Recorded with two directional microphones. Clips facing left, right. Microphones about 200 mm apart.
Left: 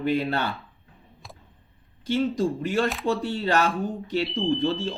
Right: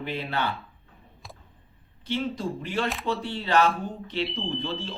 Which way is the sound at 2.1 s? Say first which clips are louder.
Left 5 dB; 45° left (ahead or behind).